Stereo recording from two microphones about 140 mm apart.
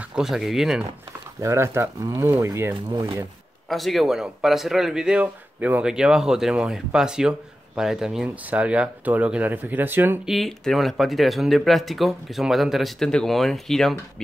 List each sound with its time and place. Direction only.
0.1 s speech: 5° right (ahead or behind)
1.4 s speech: 20° right (ahead or behind)
3.6 s speech: centre (ahead or behind); by 10.2 s 15° right (ahead or behind)
10.2 s speech: centre (ahead or behind)